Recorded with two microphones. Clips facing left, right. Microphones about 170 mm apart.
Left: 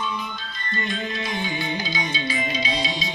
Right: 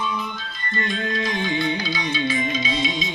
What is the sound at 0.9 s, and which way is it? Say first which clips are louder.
Music: right 4 dB; 5° left (ahead or behind).